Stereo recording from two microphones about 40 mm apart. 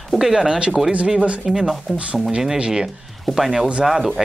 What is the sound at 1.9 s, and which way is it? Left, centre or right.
Speech, right.